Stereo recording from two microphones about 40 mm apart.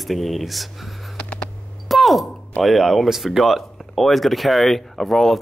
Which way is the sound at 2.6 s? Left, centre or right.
Centre.